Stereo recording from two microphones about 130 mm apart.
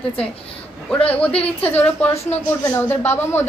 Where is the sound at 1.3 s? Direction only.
50° left (ahead or behind).